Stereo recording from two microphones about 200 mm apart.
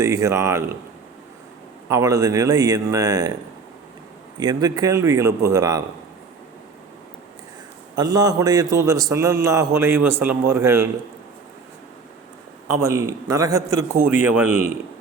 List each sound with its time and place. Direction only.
0.0 s a man's voice: 15° right (ahead or behind)
1.9 s a man's voice: 15° right (ahead or behind)
4.4 s a man's voice: 20° right (ahead or behind)
7.9 s a man's voice: 20° right (ahead or behind)
12.7 s a man's voice: 15° right (ahead or behind)